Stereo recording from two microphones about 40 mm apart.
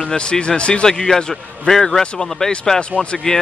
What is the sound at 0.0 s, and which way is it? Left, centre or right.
Speech, left.